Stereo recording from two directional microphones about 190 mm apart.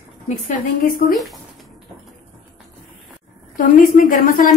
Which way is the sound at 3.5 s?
45° left (ahead or behind).